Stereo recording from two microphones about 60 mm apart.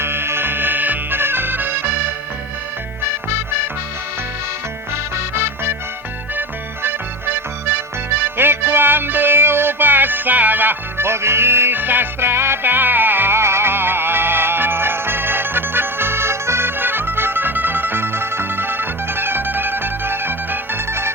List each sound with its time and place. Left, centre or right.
0.0 s music: right
5.1 s music: right
6.8 s music: right